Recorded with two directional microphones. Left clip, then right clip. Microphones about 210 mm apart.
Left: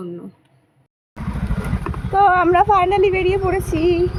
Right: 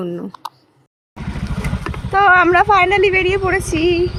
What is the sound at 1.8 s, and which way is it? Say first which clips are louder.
Speech: right 2 dB; 10° right (ahead or behind).